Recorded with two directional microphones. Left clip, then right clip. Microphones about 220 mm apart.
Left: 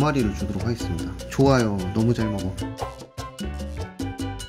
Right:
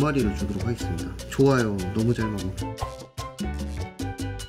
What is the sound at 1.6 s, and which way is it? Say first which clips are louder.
Speech: left 2 dB; centre (ahead or behind).